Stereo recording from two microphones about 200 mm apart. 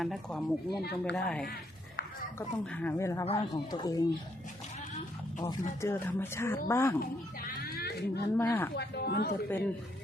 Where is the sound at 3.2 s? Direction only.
25° left (ahead or behind).